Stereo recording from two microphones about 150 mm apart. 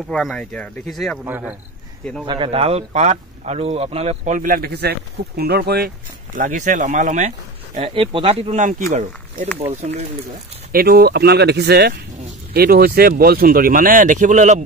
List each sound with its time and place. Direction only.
0.1 s speech: 5° left (ahead or behind)
1.2 s a man's voice: 10° right (ahead or behind)
2.2 s speech: 35° right (ahead or behind); by 5.9 s 90° right
6.3 s speech: 60° right (ahead or behind)
7.9 s speech: 35° right (ahead or behind); by 9.5 s 55° right (ahead or behind)
9.7 s speech: 45° right (ahead or behind)
10.7 s speech: 90° right; by 14.6 s 55° right (ahead or behind)